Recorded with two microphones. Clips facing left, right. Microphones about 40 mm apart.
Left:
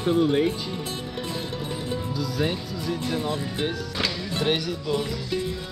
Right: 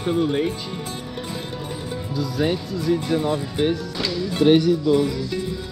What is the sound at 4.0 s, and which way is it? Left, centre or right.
Speech, centre.